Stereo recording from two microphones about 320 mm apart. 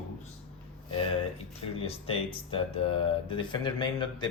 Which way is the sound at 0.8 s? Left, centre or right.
Centre.